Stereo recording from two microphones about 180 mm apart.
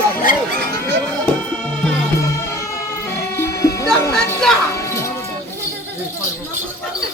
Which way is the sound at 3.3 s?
15° left (ahead or behind).